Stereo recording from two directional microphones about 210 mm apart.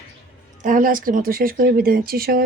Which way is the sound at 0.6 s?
40° right (ahead or behind).